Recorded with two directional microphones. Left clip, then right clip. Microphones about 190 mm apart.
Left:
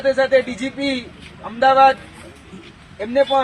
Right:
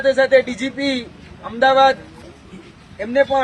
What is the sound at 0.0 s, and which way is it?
Speech, 20° right (ahead or behind).